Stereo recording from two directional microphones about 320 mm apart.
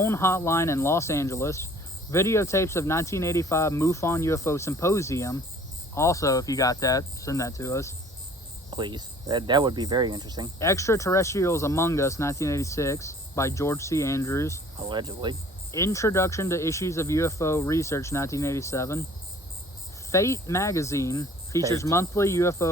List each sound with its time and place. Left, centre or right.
0.0 s speech: centre
8.7 s speech: centre
10.6 s speech: centre
14.8 s speech: centre
15.7 s speech: centre
20.1 s speech: centre